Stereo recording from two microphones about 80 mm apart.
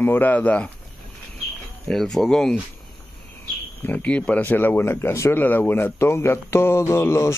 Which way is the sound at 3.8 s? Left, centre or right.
Centre.